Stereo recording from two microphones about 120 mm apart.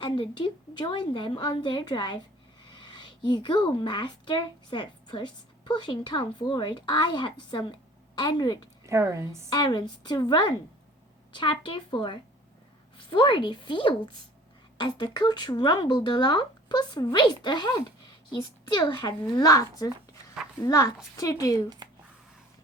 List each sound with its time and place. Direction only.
0.0 s a woman's voice: 45° left (ahead or behind)
8.9 s a woman's voice: 25° right (ahead or behind)
9.5 s a woman's voice: 35° left (ahead or behind)